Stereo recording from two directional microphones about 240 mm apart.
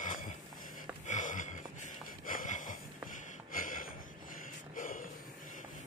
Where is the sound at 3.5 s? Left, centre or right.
Left.